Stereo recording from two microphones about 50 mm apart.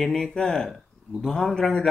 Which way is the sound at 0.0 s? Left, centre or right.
Centre.